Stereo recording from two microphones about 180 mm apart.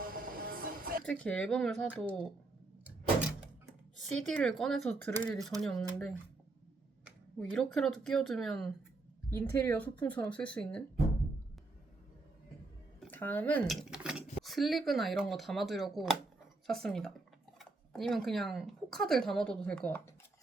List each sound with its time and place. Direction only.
0.0 s music: 50° right (ahead or behind)
1.0 s speech: 5° left (ahead or behind)
4.1 s speech: 5° left (ahead or behind)
7.3 s speech: 5° left (ahead or behind)
9.3 s speech: 15° left (ahead or behind)
13.0 s speech: 10° left (ahead or behind)
13.8 s a sound: 5° right (ahead or behind)
14.4 s speech: centre (ahead or behind)